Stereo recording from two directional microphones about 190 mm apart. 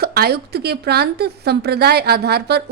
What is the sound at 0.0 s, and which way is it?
A woman's voice, 55° right (ahead or behind).